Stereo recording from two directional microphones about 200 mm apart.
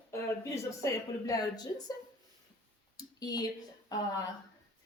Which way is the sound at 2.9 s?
20° left (ahead or behind).